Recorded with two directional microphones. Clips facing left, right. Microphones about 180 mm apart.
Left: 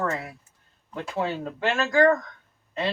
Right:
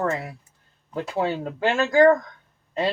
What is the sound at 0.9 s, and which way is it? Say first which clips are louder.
Speech: right 3 dB; 35° right (ahead or behind).